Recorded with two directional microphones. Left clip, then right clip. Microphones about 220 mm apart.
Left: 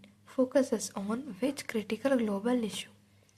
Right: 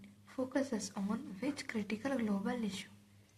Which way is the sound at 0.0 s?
45° left (ahead or behind).